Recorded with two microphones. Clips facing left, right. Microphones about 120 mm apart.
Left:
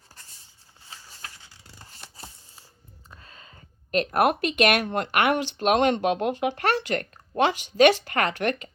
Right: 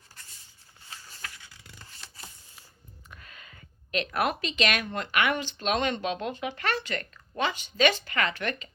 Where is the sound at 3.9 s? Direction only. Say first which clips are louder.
Left 6 dB; 50° left (ahead or behind).